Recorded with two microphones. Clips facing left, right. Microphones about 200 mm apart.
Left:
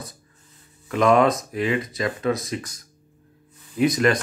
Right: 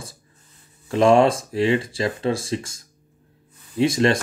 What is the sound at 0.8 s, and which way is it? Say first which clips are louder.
Speech: right 2 dB; 30° right (ahead or behind).